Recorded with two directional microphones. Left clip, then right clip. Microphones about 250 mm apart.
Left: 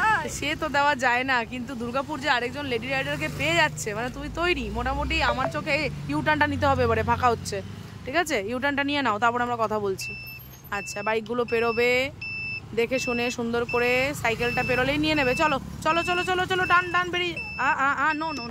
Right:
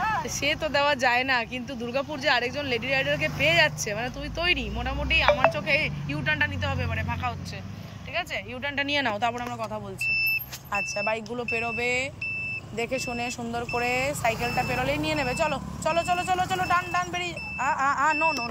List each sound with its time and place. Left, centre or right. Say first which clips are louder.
0.0 s speech: left 3 dB; centre
9.7 s speech: left 9 dB; left
10.7 s speech: even; centre